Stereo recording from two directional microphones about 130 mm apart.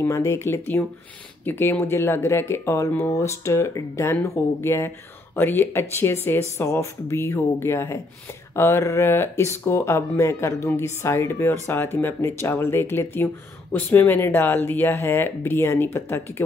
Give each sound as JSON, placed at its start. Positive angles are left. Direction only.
{"t": 0.0, "sound": "speech", "side_deg": 20}